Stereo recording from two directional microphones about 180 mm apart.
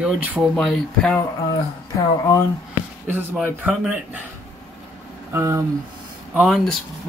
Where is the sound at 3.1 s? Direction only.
10° right (ahead or behind).